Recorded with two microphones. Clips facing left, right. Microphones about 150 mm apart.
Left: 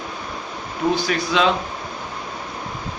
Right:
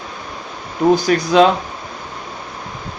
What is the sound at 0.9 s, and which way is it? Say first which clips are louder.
Speech: right 8 dB; 45° right (ahead or behind).